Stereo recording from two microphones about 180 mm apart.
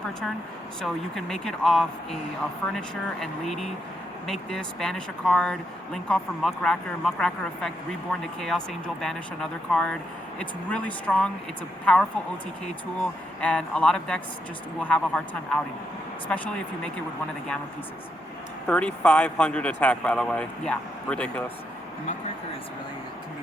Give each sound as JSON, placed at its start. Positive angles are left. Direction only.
{"t": 0.8, "sound": "speech", "side_deg": 0}
{"t": 12.6, "sound": "speech", "side_deg": 5}
{"t": 18.7, "sound": "speech", "side_deg": 5}